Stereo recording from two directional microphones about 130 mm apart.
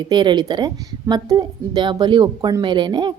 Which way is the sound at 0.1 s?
35° right (ahead or behind).